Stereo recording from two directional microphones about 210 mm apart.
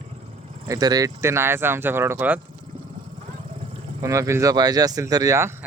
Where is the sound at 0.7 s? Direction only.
20° right (ahead or behind).